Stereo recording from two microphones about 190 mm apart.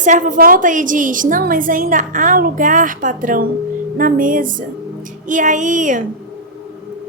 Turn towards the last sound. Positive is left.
turn(degrees=-40)  # may be behind; listen again after turning